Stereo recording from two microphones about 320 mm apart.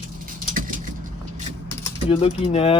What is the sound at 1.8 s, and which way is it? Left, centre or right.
Speech, centre.